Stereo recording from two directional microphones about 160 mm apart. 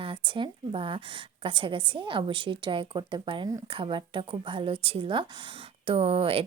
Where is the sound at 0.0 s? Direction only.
30° right (ahead or behind).